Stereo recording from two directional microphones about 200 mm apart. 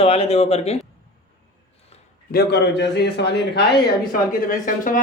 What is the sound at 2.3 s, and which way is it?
A man's voice, 55° left (ahead or behind).